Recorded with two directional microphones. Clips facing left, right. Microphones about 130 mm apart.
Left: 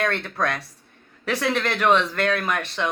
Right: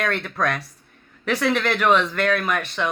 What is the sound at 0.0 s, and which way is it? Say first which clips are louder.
Speech: right 1 dB; 25° left (ahead or behind).